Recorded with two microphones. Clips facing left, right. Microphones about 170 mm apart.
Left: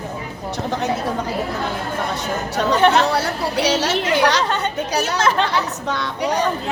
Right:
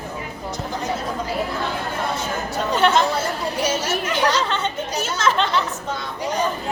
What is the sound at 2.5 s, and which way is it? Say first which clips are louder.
A woman's voice: left 3 dB; 70° left (ahead or behind).